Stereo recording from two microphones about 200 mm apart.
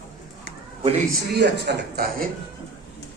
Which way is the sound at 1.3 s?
55° right (ahead or behind).